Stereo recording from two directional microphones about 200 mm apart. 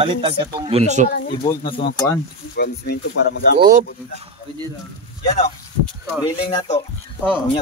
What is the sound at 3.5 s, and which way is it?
Speech, 45° right (ahead or behind).